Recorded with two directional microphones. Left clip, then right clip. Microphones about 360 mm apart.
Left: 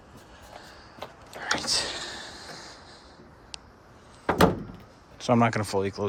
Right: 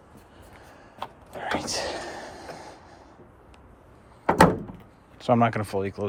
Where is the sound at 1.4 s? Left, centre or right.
Centre.